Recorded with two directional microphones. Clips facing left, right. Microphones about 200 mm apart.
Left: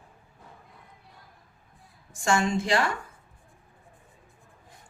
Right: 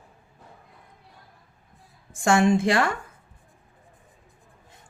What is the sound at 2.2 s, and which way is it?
Speech, 55° right (ahead or behind).